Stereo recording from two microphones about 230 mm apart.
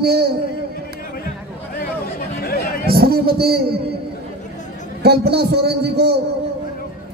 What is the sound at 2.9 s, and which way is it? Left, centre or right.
Speech, right.